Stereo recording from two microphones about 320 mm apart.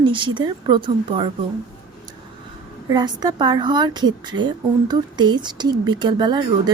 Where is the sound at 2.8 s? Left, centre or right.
Centre.